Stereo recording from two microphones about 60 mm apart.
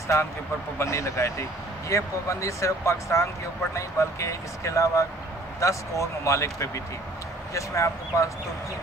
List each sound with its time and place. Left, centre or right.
0.7 s speech: left